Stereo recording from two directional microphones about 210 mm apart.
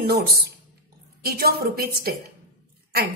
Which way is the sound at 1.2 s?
45° right (ahead or behind).